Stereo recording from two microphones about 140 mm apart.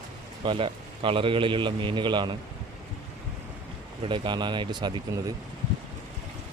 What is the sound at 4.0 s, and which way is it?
A man's voice, 35° right (ahead or behind).